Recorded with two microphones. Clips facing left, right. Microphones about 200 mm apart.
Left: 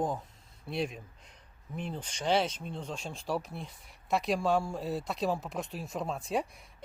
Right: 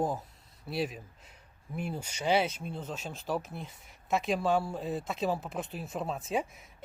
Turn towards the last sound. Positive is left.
turn(degrees=-5)  # may be behind; listen again after turning